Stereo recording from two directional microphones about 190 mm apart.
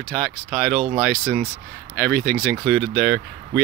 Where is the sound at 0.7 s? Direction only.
30° right (ahead or behind).